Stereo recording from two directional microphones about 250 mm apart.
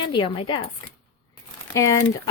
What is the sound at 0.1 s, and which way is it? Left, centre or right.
Speech, centre.